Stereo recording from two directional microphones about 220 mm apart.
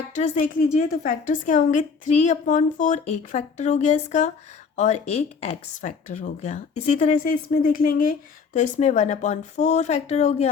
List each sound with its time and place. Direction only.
0.1 s a woman's voice: 30° left (ahead or behind)